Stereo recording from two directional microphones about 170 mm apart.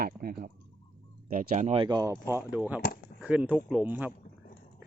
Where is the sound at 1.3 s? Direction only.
50° right (ahead or behind).